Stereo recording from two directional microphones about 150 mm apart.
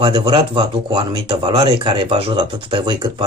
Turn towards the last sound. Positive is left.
turn(degrees=-30)  # may be behind; listen again after turning